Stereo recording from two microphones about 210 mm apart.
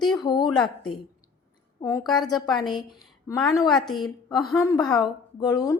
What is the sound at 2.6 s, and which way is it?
Speech, 20° left (ahead or behind).